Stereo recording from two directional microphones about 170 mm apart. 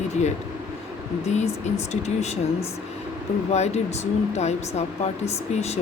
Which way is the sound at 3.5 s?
40° left (ahead or behind).